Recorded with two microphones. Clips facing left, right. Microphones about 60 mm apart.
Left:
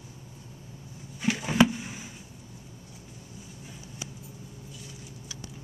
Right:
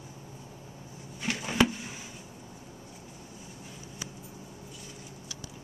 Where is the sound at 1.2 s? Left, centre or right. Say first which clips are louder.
Left 4 dB; centre.